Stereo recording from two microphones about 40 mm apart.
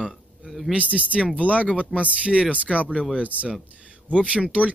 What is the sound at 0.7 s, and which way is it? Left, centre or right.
Speech, right.